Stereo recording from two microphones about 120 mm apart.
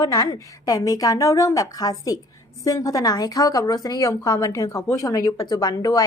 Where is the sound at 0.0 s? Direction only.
30° left (ahead or behind).